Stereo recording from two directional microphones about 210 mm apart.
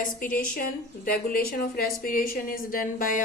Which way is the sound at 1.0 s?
45° left (ahead or behind).